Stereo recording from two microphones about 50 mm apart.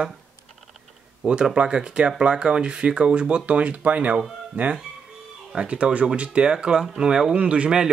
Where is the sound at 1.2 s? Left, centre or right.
Centre.